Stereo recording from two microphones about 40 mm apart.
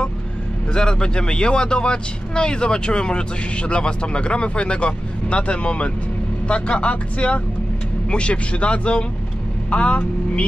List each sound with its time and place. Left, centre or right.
0.7 s speech: left